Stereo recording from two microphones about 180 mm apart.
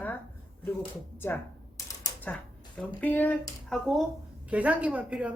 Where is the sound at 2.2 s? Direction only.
10° left (ahead or behind).